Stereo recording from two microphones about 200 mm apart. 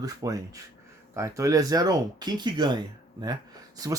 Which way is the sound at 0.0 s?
20° right (ahead or behind).